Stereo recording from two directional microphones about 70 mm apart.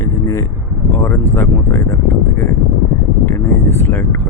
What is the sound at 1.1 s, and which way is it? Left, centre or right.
Speech, left.